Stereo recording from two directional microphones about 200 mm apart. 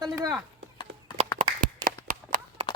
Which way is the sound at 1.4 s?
40° right (ahead or behind).